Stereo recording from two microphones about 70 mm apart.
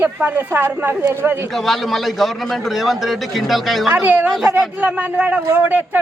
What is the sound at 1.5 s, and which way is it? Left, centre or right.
A man's voice, centre.